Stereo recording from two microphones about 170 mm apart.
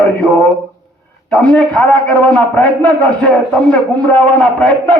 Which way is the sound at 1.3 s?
5° left (ahead or behind).